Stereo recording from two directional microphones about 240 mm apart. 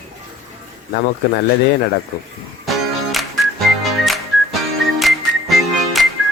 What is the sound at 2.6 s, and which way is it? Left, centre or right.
Music, centre.